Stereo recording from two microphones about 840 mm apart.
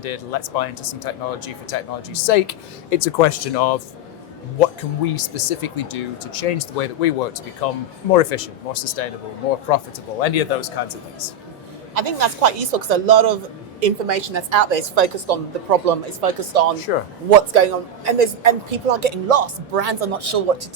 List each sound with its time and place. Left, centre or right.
0.0 s speech: left
5.0 s speech: left
11.9 s speech: right